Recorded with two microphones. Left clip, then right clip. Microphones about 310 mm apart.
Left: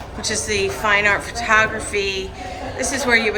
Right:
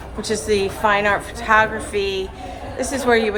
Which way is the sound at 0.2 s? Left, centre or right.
Centre.